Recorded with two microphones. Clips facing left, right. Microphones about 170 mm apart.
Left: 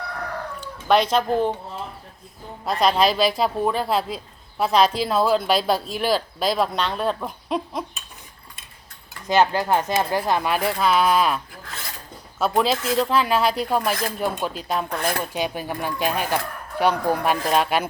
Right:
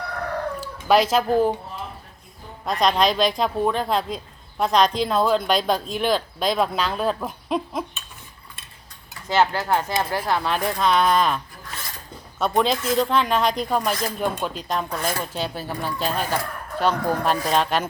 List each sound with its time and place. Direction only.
0.6 s speech: 5° right (ahead or behind)
2.6 s speech: 5° left (ahead or behind)
9.2 s speech: 15° left (ahead or behind)
12.4 s speech: 5° left (ahead or behind)